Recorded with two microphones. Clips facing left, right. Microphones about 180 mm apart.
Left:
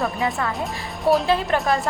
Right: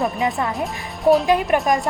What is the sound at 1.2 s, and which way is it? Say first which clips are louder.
Speech: right 3 dB; 15° right (ahead or behind).